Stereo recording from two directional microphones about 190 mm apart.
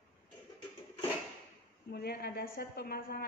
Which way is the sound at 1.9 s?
55° left (ahead or behind).